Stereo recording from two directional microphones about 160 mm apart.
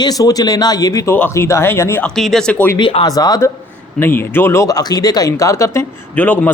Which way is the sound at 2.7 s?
30° left (ahead or behind).